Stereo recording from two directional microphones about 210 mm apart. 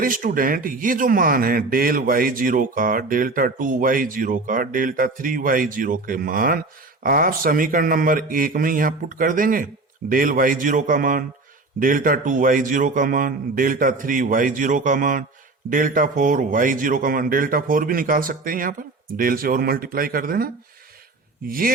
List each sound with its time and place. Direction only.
0.0 s a man's voice: 40° right (ahead or behind)